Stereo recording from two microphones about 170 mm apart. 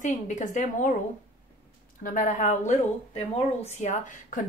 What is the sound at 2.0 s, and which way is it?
Speech, 50° left (ahead or behind).